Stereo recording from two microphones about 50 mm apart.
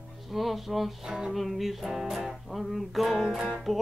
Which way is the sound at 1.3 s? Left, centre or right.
Centre.